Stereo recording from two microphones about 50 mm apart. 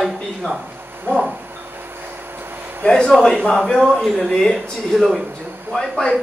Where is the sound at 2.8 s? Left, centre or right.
Centre.